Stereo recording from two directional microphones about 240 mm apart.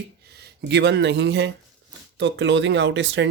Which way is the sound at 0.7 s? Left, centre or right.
Right.